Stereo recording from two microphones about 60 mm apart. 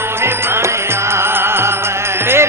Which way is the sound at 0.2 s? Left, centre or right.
Right.